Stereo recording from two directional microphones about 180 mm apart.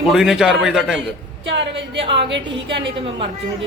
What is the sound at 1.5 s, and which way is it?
A woman's voice, 80° right.